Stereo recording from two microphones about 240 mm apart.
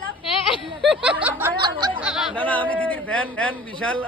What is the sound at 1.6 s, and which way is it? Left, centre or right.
Snicker, centre.